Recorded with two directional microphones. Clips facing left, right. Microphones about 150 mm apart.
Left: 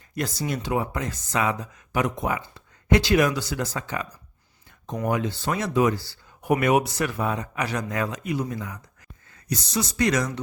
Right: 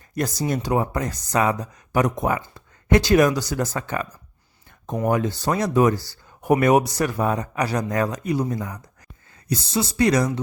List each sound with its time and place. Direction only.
0.1 s speech: 40° right (ahead or behind)
5.0 s speech: 45° right (ahead or behind)